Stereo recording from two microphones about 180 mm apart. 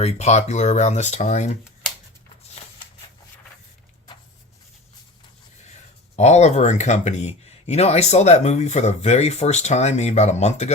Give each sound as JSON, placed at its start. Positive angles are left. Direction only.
{"t": 0.0, "sound": "speech", "side_deg": 40}
{"t": 6.1, "sound": "speech", "side_deg": 40}